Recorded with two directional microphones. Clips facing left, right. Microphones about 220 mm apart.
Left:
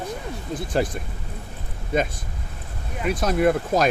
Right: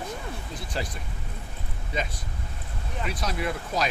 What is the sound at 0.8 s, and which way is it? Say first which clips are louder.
Speech: left 10 dB; 50° left (ahead or behind).